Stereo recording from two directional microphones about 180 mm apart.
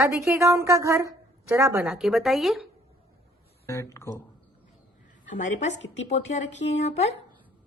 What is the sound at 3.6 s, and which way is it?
Speech, 15° left (ahead or behind).